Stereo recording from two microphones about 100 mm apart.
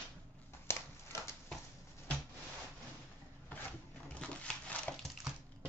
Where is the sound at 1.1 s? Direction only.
30° left (ahead or behind).